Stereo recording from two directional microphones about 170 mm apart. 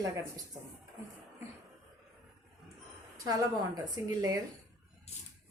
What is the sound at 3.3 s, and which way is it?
A woman's voice, 20° right (ahead or behind).